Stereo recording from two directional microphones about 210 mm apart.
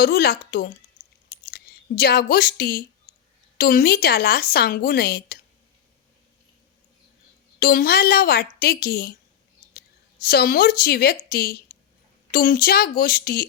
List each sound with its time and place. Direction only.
0.0 s a woman's voice: 45° left (ahead or behind)
7.6 s a woman's voice: 45° left (ahead or behind)
10.2 s a woman's voice: 45° left (ahead or behind)